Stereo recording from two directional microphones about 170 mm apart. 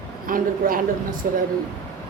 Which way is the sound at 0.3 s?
55° right (ahead or behind).